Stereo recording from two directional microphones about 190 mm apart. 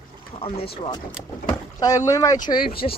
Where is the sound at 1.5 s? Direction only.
20° left (ahead or behind).